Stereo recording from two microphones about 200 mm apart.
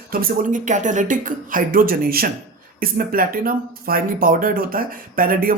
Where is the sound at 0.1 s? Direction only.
45° right (ahead or behind).